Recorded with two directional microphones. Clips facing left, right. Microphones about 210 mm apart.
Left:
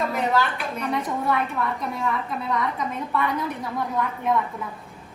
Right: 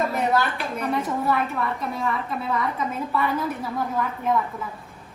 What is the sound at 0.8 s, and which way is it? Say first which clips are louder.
A woman's voice: right 1 dB; centre (ahead or behind).